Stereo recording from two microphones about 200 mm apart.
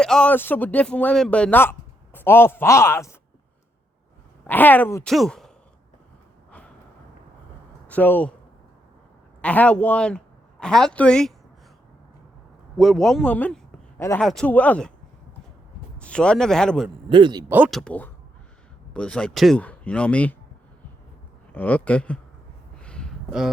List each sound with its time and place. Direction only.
0.0 s speech: 5° left (ahead or behind)
4.4 s speech: 10° left (ahead or behind)
5.0 s speech: centre (ahead or behind)
7.9 s speech: 10° left (ahead or behind)
9.4 s a woman's voice: 5° left (ahead or behind)
12.7 s speech: centre (ahead or behind)
16.0 s speech: 5° left (ahead or behind)
17.1 s speech: 25° right (ahead or behind)
17.5 s speech: 5° right (ahead or behind)
21.5 s speech: 10° left (ahead or behind)
22.8 s a sound: 5° left (ahead or behind)